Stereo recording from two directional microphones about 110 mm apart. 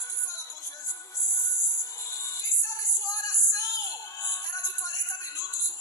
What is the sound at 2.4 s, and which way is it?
Music, 30° left (ahead or behind).